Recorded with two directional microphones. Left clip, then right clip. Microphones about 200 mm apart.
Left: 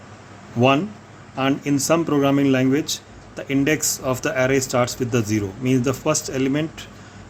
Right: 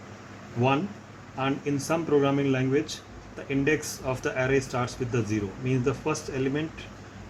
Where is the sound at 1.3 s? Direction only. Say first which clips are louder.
Left 7 dB; 50° left (ahead or behind).